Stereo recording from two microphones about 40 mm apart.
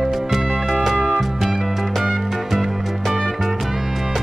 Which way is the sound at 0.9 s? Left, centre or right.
Left.